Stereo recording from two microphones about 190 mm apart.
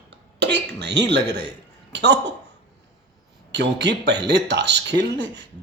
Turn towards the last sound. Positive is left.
turn(degrees=-65)  # may be behind; listen again after turning